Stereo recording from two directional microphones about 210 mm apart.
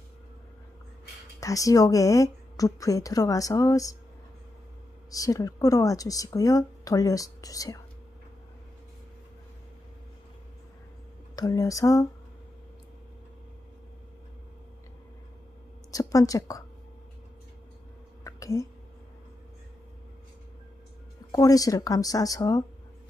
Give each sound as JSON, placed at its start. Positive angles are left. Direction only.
{"t": 1.4, "sound": "speech", "side_deg": 15}
{"t": 5.1, "sound": "speech", "side_deg": 15}
{"t": 11.3, "sound": "speech", "side_deg": 20}
{"t": 15.9, "sound": "a woman's voice", "side_deg": 15}
{"t": 18.2, "sound": "a sound", "side_deg": 15}
{"t": 21.3, "sound": "speech", "side_deg": 15}